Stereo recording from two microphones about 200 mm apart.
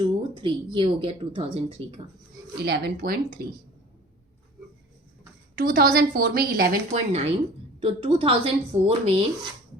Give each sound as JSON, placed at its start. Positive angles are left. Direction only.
{"t": 0.0, "sound": "speech", "side_deg": -25}
{"t": 2.6, "sound": "a woman's voice", "side_deg": -55}
{"t": 5.5, "sound": "a woman's voice", "side_deg": -45}